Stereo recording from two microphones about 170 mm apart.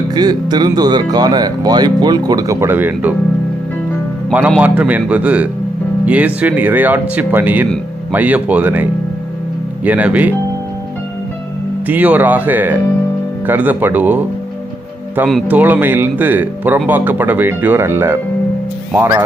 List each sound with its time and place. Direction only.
0.1 s speech: 25° right (ahead or behind)
4.3 s speech: 10° right (ahead or behind)
11.9 s speech: 10° right (ahead or behind)
15.4 s speech: 10° right (ahead or behind)